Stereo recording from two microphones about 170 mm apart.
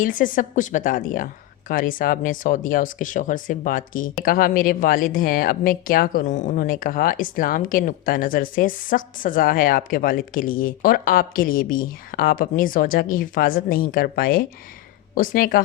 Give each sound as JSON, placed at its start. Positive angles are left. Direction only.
{"t": 0.0, "sound": "speech", "side_deg": 55}